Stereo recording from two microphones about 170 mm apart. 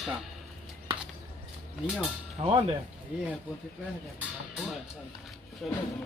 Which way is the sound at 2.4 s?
30° right (ahead or behind).